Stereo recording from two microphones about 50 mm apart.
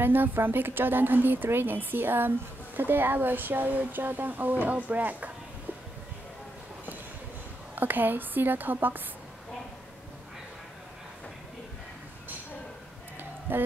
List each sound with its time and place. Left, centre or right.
0.0 s a woman's voice: right
7.7 s a woman's voice: right
13.2 s a sound: right